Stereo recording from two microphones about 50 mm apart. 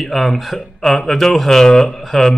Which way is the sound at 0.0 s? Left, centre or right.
Centre.